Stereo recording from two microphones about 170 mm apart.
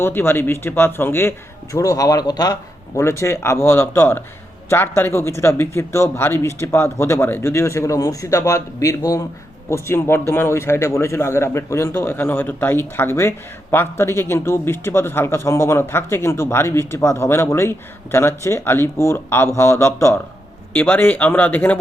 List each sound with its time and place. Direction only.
0.0 s a man's voice: 15° left (ahead or behind)